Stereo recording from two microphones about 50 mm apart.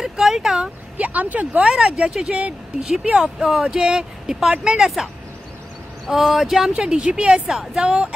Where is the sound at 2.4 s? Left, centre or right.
Right.